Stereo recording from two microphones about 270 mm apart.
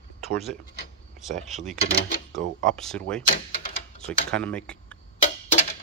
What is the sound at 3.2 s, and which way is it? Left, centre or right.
Door, left.